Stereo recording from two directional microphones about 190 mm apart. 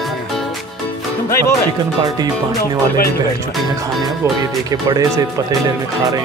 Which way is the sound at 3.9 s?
Centre (ahead or behind).